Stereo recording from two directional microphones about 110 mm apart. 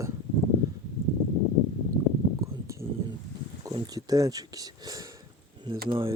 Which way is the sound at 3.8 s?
35° right (ahead or behind).